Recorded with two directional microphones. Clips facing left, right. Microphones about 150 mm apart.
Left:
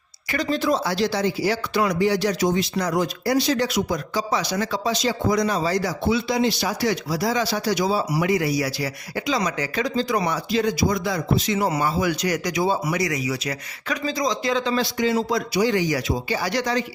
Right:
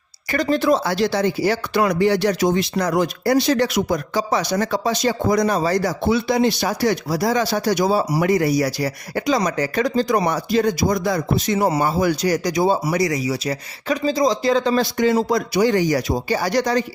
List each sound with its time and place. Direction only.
0.3 s speech: 45° right (ahead or behind)